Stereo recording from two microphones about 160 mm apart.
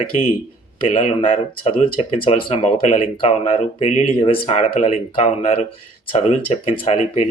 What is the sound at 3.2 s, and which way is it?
Speech, 35° left (ahead or behind).